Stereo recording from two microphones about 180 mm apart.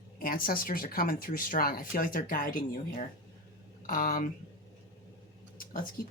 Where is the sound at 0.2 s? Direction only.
50° left (ahead or behind).